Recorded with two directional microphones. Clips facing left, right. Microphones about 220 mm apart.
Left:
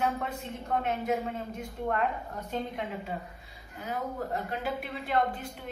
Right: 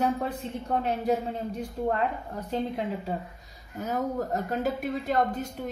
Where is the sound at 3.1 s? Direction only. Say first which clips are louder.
Right 4 dB; 40° right (ahead or behind).